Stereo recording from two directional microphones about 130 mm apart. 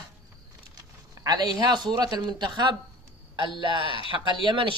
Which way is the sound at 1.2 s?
30° right (ahead or behind).